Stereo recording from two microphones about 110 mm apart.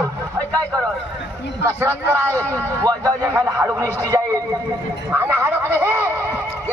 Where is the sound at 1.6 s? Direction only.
20° right (ahead or behind).